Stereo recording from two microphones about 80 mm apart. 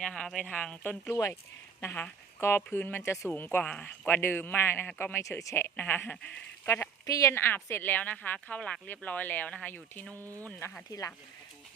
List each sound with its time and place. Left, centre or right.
0.0 s a woman's voice: centre
4.1 s a woman's voice: left
4.9 s a woman's voice: centre
5.1 s speech: left
5.7 s a woman's voice: left
6.7 s a woman's voice: left
10.2 s speech: right